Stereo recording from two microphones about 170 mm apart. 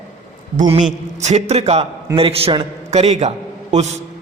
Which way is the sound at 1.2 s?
40° right (ahead or behind).